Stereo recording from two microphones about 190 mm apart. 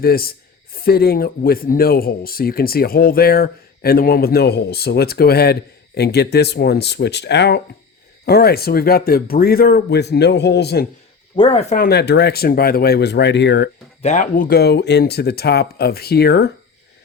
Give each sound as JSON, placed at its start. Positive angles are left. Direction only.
{"t": 0.0, "sound": "a man's voice", "side_deg": 50}
{"t": 11.3, "sound": "speech", "side_deg": 30}
{"t": 11.8, "sound": "speech", "side_deg": 60}
{"t": 14.0, "sound": "speech", "side_deg": 40}